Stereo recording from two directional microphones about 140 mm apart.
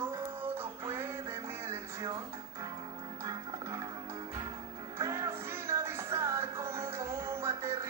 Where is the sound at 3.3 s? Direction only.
25° right (ahead or behind).